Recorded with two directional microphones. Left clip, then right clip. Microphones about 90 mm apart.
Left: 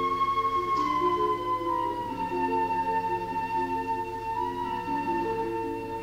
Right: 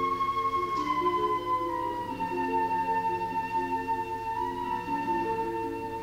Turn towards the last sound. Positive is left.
turn(degrees=25)  # may be behind; listen again after turning